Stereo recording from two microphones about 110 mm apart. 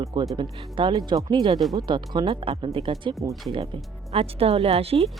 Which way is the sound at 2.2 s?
55° right (ahead or behind).